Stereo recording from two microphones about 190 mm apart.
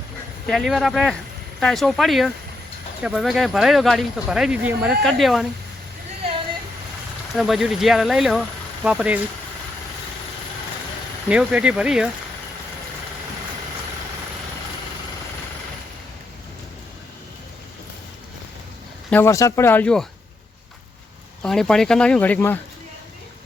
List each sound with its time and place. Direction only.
0.4 s speech: centre (ahead or behind)
7.3 s speech: centre (ahead or behind)
11.3 s speech: 5° right (ahead or behind)
19.1 s speech: 15° left (ahead or behind)
21.4 s speech: 5° left (ahead or behind)